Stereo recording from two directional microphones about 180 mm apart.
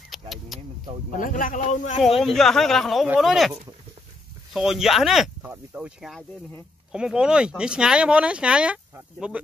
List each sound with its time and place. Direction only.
0.1 s vehicle: centre (ahead or behind)
1.1 s a man's voice: 50° left (ahead or behind)
2.2 s speech: centre (ahead or behind)
4.6 s speech: centre (ahead or behind)